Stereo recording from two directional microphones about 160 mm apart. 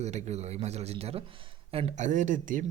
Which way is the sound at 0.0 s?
45° right (ahead or behind).